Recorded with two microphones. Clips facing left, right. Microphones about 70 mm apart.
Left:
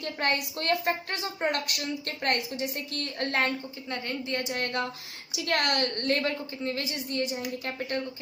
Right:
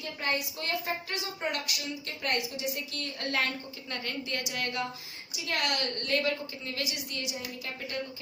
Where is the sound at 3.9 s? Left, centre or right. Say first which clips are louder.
Left 3 dB; left.